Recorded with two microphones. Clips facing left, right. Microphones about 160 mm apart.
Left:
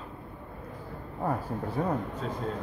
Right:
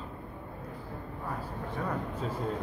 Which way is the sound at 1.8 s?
30° left (ahead or behind).